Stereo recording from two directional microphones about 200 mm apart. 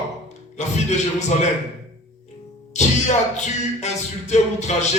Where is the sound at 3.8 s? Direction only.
35° left (ahead or behind).